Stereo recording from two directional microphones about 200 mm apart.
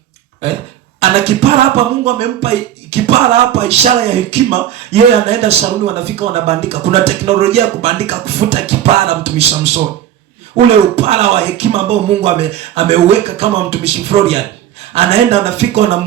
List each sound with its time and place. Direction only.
0.9 s speech: 30° right (ahead or behind)
10.7 s speech: 30° right (ahead or behind)